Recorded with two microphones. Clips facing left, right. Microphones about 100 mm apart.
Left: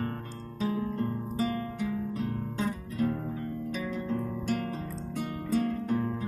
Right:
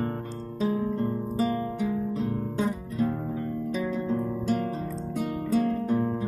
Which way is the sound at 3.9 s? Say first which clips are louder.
Right 4 dB; 20° right (ahead or behind).